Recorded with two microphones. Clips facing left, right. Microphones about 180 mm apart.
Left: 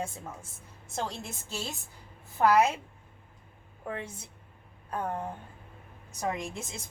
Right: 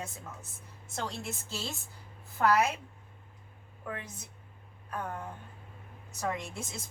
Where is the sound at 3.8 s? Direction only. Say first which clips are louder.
Left 4 dB; 25° left (ahead or behind).